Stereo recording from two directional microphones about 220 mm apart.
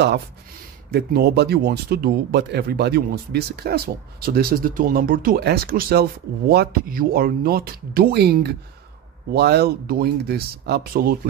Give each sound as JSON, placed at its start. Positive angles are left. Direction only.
{"t": 0.9, "sound": "speech", "side_deg": -45}